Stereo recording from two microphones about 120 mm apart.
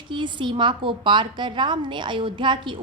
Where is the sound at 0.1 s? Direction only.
40° right (ahead or behind).